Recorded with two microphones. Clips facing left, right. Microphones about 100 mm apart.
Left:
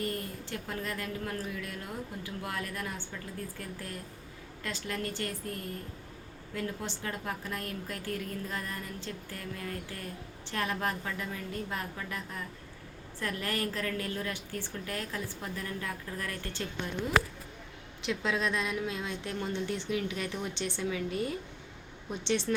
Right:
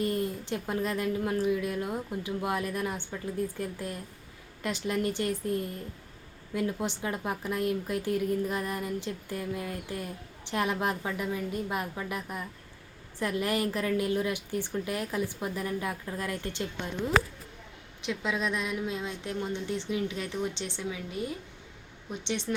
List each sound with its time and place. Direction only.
0.0 s a woman's voice: 20° right (ahead or behind)
18.0 s a woman's voice: 15° right (ahead or behind)
22.5 s speech: 10° right (ahead or behind)